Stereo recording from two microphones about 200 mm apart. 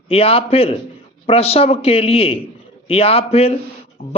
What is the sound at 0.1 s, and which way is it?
A man's voice, 30° left (ahead or behind).